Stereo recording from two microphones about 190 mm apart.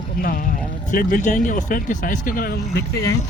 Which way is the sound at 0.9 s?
45° left (ahead or behind).